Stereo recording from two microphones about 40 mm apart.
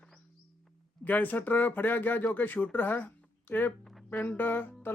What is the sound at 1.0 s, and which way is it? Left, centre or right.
Speech, left.